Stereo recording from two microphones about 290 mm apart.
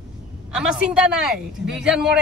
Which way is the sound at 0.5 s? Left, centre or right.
Centre.